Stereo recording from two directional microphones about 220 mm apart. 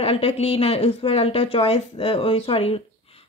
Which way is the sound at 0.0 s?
25° left (ahead or behind).